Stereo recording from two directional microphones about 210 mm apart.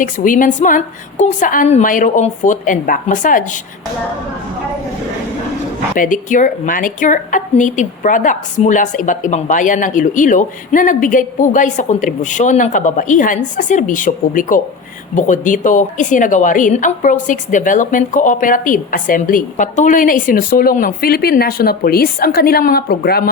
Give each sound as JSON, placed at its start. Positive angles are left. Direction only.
{"t": 0.0, "sound": "a woman's voice", "side_deg": 40}
{"t": 6.0, "sound": "a woman's voice", "side_deg": 35}